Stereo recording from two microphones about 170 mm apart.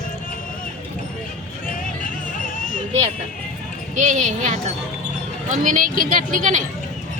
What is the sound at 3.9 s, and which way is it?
A woman's voice, 45° right (ahead or behind).